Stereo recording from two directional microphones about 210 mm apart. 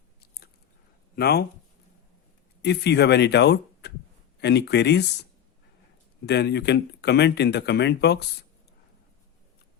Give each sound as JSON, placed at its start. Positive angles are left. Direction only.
{"t": 1.1, "sound": "speech", "side_deg": 50}
{"t": 2.6, "sound": "speech", "side_deg": 50}
{"t": 6.2, "sound": "speech", "side_deg": 55}